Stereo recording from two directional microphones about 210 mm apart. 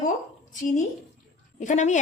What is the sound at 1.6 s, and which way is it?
Speech, 35° left (ahead or behind).